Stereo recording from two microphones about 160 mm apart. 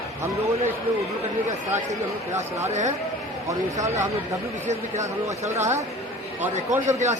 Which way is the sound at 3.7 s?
20° right (ahead or behind).